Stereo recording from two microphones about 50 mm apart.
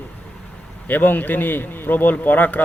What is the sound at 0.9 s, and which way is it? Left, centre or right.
A man's voice, left.